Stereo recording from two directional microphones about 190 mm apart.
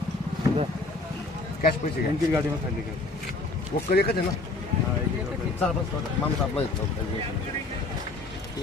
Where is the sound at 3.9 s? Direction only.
55° left (ahead or behind).